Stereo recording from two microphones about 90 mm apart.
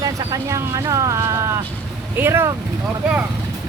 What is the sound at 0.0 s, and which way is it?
Speech, 35° right (ahead or behind).